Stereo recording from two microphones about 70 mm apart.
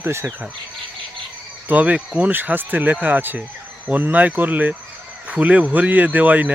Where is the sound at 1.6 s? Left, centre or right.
Right.